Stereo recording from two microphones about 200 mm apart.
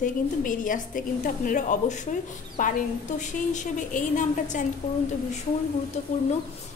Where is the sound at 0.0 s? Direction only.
40° left (ahead or behind).